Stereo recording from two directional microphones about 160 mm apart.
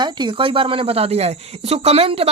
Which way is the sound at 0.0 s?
30° right (ahead or behind).